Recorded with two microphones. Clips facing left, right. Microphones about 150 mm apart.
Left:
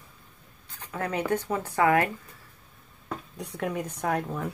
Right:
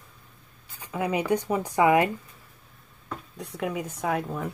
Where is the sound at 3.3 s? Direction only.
5° right (ahead or behind).